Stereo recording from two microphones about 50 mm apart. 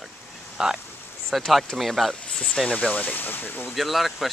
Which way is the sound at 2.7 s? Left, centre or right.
Left.